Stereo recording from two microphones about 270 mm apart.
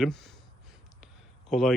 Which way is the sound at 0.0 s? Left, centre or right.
Centre.